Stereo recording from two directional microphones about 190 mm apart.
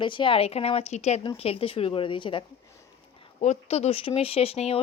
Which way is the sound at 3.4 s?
35° left (ahead or behind).